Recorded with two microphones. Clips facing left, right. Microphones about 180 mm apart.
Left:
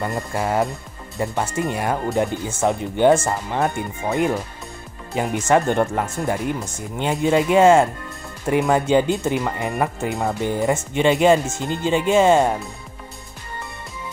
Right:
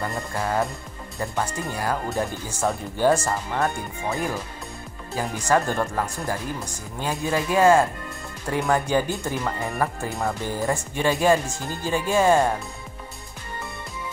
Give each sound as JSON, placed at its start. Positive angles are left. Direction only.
{"t": 0.0, "sound": "speech", "side_deg": 20}